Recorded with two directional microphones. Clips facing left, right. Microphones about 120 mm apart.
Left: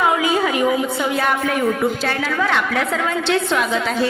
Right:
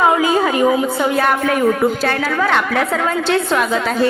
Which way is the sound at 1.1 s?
55° right (ahead or behind).